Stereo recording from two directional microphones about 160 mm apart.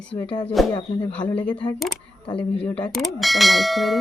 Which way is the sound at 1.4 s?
10° left (ahead or behind).